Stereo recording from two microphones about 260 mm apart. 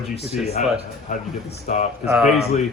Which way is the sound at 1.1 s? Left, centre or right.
Left.